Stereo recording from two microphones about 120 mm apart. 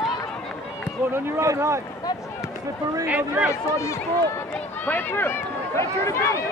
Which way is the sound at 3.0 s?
15° right (ahead or behind).